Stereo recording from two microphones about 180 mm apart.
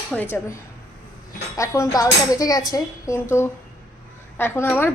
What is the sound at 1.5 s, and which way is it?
Speech, 15° left (ahead or behind).